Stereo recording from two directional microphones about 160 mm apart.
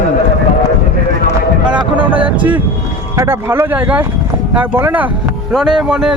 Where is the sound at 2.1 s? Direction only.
10° right (ahead or behind).